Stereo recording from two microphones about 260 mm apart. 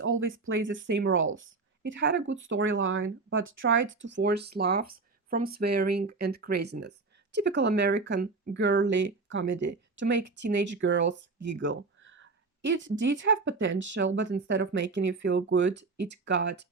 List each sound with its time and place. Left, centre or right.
0.0 s speech: right